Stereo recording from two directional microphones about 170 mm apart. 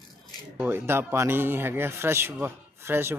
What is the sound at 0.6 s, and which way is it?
Speech, 15° right (ahead or behind).